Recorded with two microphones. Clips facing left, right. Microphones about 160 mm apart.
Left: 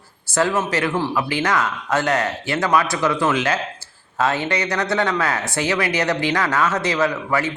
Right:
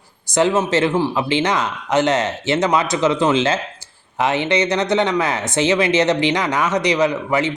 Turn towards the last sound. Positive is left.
turn(degrees=-20)  # may be behind; listen again after turning